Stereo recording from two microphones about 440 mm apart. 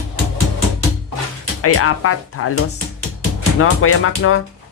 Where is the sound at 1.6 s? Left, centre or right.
Left.